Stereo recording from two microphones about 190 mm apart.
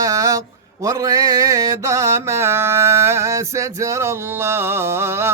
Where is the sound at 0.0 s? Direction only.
15° right (ahead or behind).